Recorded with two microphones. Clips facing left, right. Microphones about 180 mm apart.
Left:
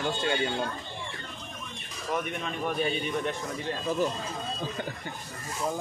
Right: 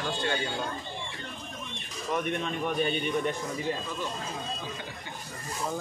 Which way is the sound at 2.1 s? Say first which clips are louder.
Right 2 dB; centre (ahead or behind).